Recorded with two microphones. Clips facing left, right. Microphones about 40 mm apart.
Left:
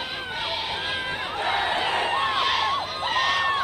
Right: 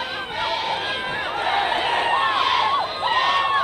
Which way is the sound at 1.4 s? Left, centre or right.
Right.